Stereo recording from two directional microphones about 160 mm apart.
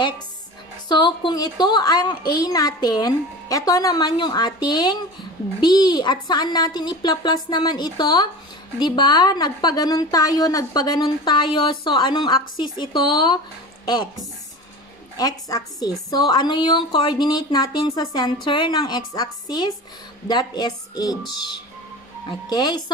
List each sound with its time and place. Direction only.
0.8 s a woman's voice: 30° left (ahead or behind)
15.1 s a woman's voice: 25° left (ahead or behind)
22.5 s a woman's voice: 25° left (ahead or behind)